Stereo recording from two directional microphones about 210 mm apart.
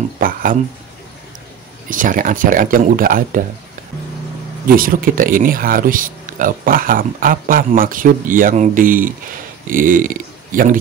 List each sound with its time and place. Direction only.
0.2 s speech: 40° right (ahead or behind)
1.9 s speech: 40° right (ahead or behind)
4.7 s speech: 40° right (ahead or behind)